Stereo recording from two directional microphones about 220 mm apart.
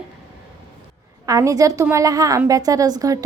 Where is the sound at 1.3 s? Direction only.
15° right (ahead or behind).